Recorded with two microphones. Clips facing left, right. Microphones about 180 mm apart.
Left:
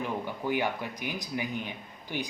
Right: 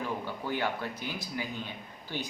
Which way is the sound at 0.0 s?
15° left (ahead or behind).